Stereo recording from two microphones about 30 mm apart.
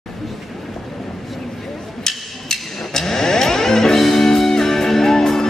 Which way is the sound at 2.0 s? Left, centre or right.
Centre.